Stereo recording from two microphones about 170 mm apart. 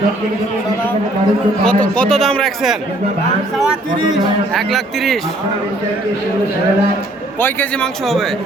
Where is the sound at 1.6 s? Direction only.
5° left (ahead or behind).